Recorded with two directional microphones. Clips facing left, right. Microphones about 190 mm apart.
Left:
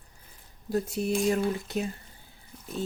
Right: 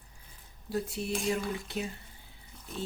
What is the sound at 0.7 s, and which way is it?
Speech, 45° left (ahead or behind).